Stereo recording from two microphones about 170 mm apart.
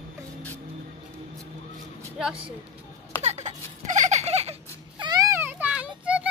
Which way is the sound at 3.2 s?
40° right (ahead or behind).